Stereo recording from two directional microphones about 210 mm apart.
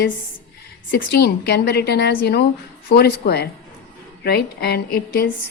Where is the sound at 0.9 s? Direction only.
45° left (ahead or behind).